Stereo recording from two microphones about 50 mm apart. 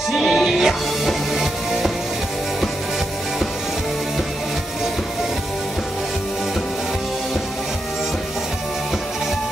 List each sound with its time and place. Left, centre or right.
0.1 s music: centre